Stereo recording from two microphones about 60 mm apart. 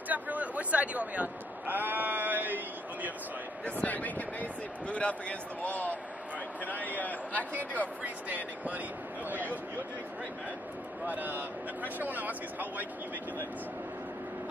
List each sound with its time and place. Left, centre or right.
0.1 s sheep: right
3.6 s speech: left
11.1 s speech: right